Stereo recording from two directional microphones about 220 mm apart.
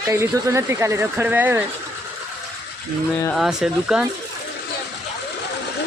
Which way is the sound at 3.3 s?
Centre (ahead or behind).